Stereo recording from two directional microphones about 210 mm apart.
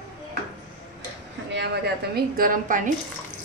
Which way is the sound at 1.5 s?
55° right (ahead or behind).